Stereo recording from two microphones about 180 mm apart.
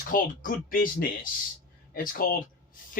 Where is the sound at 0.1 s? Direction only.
50° left (ahead or behind).